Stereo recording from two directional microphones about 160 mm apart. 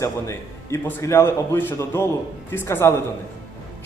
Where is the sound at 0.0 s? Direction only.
20° left (ahead or behind).